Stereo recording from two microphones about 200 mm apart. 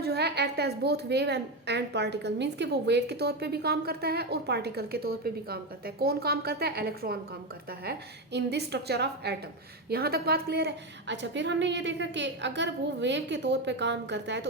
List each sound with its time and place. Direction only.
0.0 s a woman's voice: 55° right (ahead or behind)